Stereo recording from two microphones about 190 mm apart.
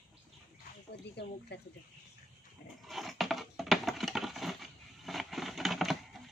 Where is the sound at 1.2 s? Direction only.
65° left (ahead or behind).